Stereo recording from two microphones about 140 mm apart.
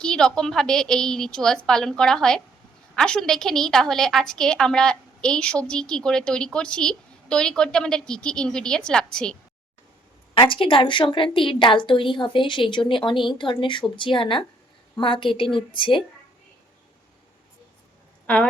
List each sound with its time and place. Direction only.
0.0 s a woman's voice: 5° left (ahead or behind)
10.3 s a woman's voice: 35° left (ahead or behind)